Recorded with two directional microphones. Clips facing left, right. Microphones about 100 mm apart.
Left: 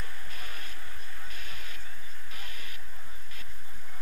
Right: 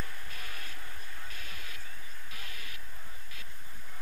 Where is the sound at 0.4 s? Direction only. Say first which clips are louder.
Left 1 dB; 30° left (ahead or behind).